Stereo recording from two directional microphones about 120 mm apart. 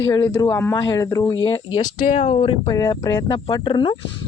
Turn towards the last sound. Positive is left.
turn(degrees=40)  # may be behind; listen again after turning